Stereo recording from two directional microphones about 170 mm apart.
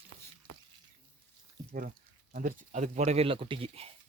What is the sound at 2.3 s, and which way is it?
Speech, 50° right (ahead or behind).